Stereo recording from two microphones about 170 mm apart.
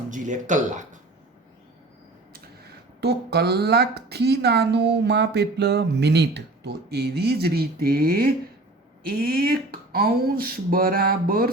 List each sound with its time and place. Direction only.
0.1 s speech: 45° right (ahead or behind)
2.3 s speech: 70° right (ahead or behind)